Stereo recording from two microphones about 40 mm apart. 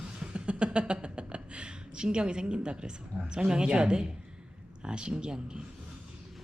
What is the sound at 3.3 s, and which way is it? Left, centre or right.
Speech, right.